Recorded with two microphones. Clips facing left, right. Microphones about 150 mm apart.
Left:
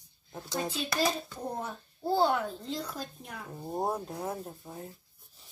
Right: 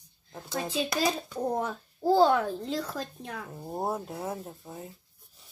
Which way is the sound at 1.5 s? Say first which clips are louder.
Right 6 dB; 90° right.